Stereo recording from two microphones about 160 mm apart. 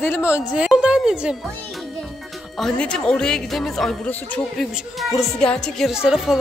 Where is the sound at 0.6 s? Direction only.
5° right (ahead or behind).